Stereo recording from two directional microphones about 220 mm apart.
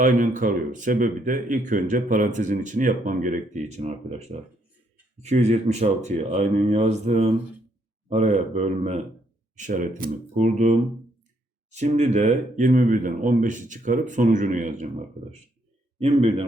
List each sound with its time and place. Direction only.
0.0 s a man's voice: 35° right (ahead or behind)